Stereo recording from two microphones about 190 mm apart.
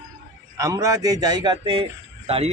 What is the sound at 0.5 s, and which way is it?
A man's voice, 15° right (ahead or behind).